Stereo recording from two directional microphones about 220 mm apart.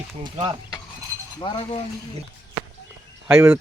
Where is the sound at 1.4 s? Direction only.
20° left (ahead or behind).